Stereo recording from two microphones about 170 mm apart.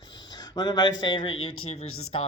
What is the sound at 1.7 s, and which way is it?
Speech, 40° left (ahead or behind).